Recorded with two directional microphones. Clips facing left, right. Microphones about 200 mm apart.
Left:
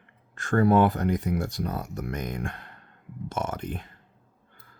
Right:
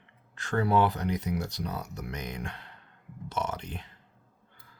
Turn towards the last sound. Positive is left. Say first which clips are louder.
# left 4 dB
turn(degrees=50)  # may be behind; listen again after turning